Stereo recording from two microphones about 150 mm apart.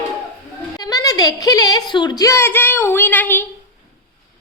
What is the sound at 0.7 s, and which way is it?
A woman's voice, 25° left (ahead or behind).